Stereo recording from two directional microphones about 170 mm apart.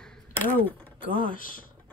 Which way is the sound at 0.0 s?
5° left (ahead or behind).